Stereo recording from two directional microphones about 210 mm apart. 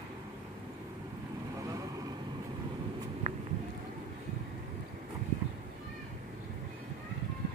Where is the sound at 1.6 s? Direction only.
15° right (ahead or behind).